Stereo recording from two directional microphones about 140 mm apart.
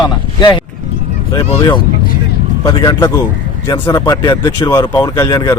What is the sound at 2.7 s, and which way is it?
Speech, 25° left (ahead or behind).